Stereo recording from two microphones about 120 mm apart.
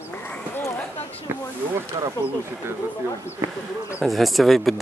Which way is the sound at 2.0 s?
35° right (ahead or behind).